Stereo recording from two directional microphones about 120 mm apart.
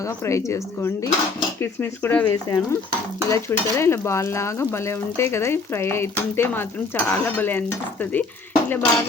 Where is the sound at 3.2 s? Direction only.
25° left (ahead or behind).